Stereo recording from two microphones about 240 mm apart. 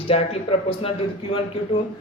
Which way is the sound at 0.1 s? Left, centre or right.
Left.